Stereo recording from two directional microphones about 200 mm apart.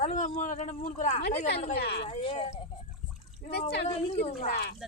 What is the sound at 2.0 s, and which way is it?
Speech, 30° left (ahead or behind).